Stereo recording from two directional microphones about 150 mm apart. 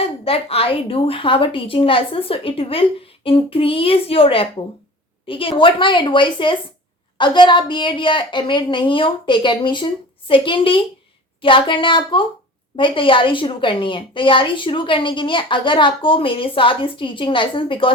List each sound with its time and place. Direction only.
0.0 s a woman's voice: 40° left (ahead or behind)